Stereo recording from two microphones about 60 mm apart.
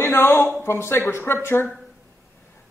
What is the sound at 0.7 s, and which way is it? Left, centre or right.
Speech, left.